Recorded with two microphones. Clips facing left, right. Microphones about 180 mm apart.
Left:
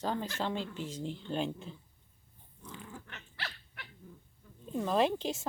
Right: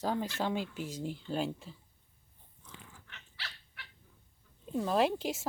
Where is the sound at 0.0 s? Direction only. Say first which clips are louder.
Right 1 dB; 10° right (ahead or behind).